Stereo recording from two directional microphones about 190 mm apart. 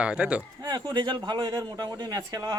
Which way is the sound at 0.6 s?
20° right (ahead or behind).